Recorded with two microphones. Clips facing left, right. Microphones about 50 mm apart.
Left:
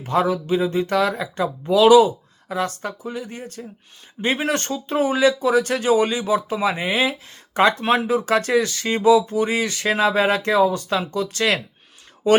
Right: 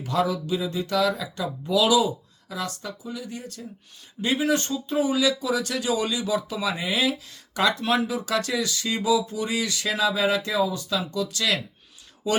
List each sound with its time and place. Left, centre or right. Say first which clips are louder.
0.0 s speech: left 4 dB; left